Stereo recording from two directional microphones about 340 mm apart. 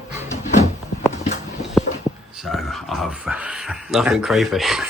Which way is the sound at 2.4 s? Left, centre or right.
Centre.